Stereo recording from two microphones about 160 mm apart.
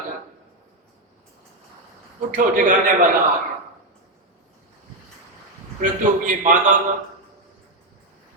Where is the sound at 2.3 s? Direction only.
55° right (ahead or behind).